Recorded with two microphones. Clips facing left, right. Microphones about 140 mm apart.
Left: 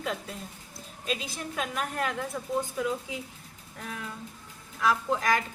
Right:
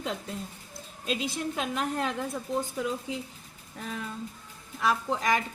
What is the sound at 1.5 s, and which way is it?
Speech, 25° right (ahead or behind).